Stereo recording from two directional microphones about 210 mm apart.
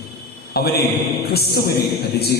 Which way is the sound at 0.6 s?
50° left (ahead or behind).